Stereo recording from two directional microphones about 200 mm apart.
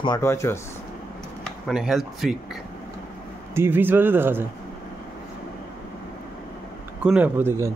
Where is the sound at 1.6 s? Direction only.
Centre (ahead or behind).